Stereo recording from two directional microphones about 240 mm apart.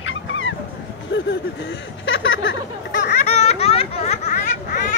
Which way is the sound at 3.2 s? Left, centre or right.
Left.